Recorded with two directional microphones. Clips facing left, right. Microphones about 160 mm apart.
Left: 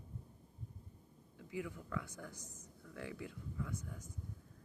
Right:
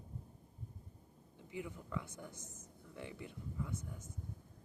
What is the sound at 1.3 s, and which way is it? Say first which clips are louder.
Speech: left 2 dB; 25° right (ahead or behind).